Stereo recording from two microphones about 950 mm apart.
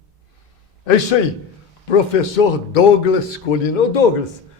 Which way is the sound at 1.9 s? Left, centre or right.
Left.